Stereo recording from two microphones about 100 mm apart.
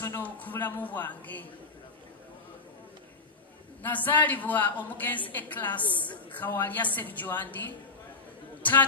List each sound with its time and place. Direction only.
0.0 s a woman's voice: 20° left (ahead or behind)
3.8 s a woman's voice: 20° left (ahead or behind)